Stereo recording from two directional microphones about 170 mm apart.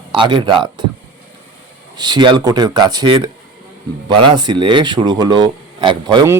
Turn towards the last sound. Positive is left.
turn(degrees=-25)  # may be behind; listen again after turning